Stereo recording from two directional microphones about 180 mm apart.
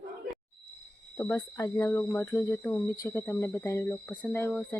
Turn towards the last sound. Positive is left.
turn(degrees=15)  # may be behind; listen again after turning